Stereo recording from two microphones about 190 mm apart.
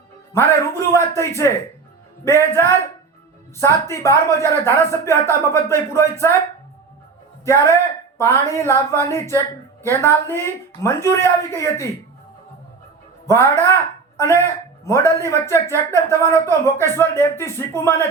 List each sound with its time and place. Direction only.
0.9 s speech: 15° left (ahead or behind)
7.4 s speech: 15° left (ahead or behind)
13.2 s speech: 15° left (ahead or behind)